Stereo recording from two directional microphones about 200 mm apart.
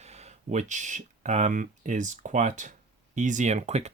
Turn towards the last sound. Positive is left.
turn(degrees=-35)  # may be behind; listen again after turning